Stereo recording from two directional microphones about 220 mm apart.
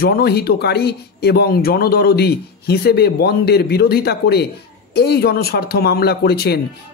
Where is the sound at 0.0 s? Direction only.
45° left (ahead or behind).